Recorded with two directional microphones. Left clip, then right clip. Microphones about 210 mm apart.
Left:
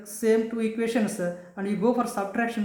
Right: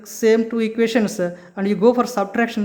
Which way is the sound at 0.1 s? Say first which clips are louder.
Right 7 dB; 40° right (ahead or behind).